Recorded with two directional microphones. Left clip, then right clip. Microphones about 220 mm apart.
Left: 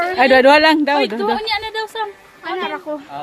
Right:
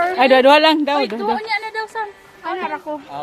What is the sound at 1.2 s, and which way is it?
Speech, 40° left (ahead or behind).